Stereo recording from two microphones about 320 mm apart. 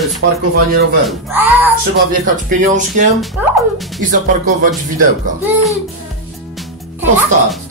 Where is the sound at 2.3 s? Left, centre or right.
Right.